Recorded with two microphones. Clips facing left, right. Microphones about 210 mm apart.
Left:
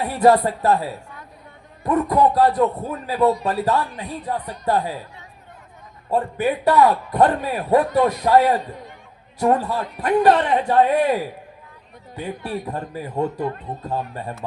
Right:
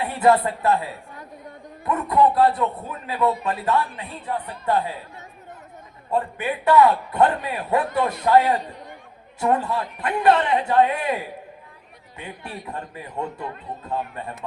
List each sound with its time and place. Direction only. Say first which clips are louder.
0.0 s speech: left 3 dB; 40° left (ahead or behind)
1.8 s a man's voice: left 2 dB; 35° left (ahead or behind)
6.1 s a man's voice: left 4 dB; 35° left (ahead or behind)
9.4 s a man's voice: left 3 dB; 40° left (ahead or behind)